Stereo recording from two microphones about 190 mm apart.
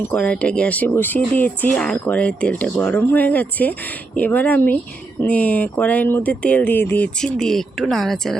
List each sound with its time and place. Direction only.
0.1 s speech: 5° left (ahead or behind)